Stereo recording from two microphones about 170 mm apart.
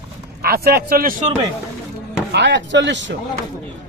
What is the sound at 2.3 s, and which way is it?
Speech, 90° right.